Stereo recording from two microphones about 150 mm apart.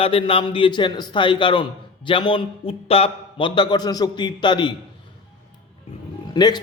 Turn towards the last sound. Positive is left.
turn(degrees=30)  # may be behind; listen again after turning